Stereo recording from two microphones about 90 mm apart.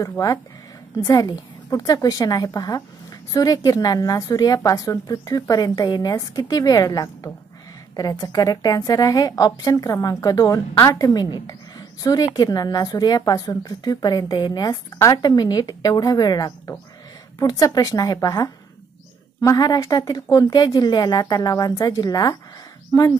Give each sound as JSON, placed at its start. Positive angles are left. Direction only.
{"t": 0.9, "sound": "a woman's voice", "side_deg": 45}